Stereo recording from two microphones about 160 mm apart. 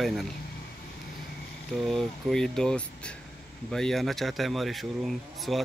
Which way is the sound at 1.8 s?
Centre (ahead or behind).